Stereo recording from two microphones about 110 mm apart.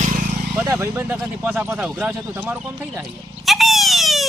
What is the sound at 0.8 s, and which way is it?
Speech, 25° right (ahead or behind).